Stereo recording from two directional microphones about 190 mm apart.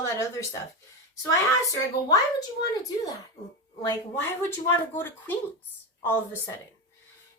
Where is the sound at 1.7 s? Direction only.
20° left (ahead or behind).